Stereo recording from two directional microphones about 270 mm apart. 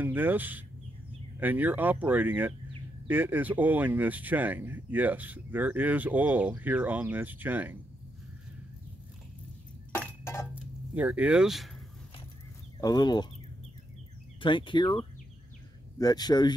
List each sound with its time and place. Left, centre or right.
0.0 s speech: centre
9.9 s chink: centre
10.5 s speech: centre
12.8 s speech: centre
14.4 s speech: centre